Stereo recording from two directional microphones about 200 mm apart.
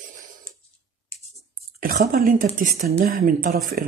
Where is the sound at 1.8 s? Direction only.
45° right (ahead or behind).